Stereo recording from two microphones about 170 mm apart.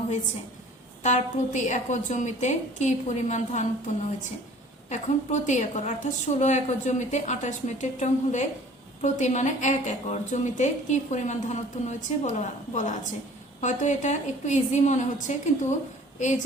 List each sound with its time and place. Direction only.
1.0 s a woman's voice: 45° left (ahead or behind)